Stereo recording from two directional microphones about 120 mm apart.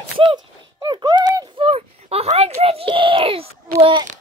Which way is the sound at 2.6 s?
55° right (ahead or behind).